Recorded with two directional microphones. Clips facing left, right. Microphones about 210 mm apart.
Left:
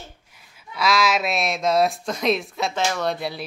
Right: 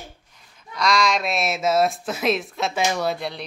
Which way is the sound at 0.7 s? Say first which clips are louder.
Even; 5° left (ahead or behind).